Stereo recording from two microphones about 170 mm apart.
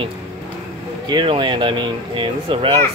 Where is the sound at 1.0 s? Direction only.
25° right (ahead or behind).